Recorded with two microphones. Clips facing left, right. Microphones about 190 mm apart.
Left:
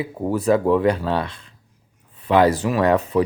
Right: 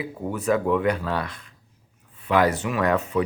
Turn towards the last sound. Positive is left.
turn(degrees=35)  # may be behind; listen again after turning